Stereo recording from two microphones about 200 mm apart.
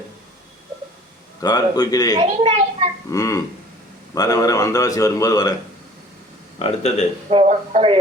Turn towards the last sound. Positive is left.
turn(degrees=-30)  # may be behind; listen again after turning